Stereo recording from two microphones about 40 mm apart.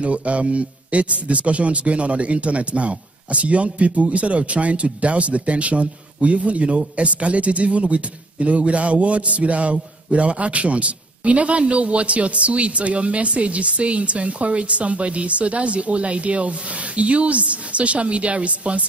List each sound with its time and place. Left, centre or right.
0.0 s a man's voice: right